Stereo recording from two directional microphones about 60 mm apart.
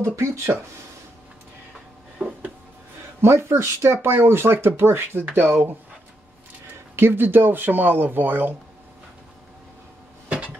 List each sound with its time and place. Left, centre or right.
0.5 s speech: right
2.2 s a sound: right
3.2 s speech: right
7.0 s speech: right